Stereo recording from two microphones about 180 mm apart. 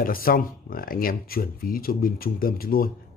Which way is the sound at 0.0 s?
55° left (ahead or behind).